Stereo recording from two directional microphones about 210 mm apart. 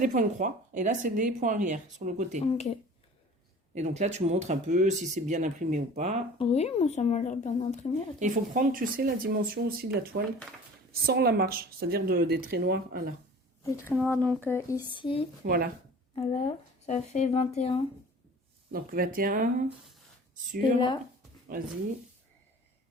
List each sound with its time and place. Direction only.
0.0 s speech: 35° right (ahead or behind)
2.5 s speech: 30° left (ahead or behind)
3.8 s speech: 35° right (ahead or behind)
6.4 s speech: 30° left (ahead or behind)
8.2 s speech: 40° right (ahead or behind)
13.7 s speech: 15° left (ahead or behind)
15.4 s speech: 45° right (ahead or behind)
16.8 s speech: 35° left (ahead or behind)
18.7 s speech: 45° right (ahead or behind)